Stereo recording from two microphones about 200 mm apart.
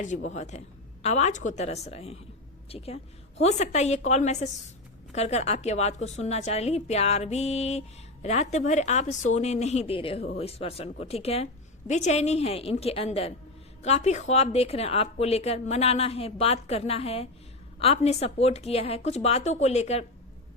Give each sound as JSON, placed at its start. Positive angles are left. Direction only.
{"t": 0.0, "sound": "a woman's voice", "side_deg": 35}